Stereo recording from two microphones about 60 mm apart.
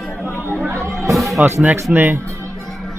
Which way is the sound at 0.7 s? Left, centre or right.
Right.